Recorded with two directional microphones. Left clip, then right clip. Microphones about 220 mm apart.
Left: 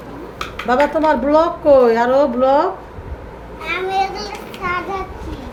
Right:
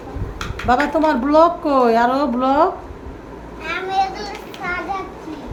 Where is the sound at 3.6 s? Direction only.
15° right (ahead or behind).